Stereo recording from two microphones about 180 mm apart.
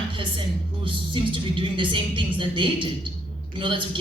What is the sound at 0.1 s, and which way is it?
A woman's voice, 30° right (ahead or behind).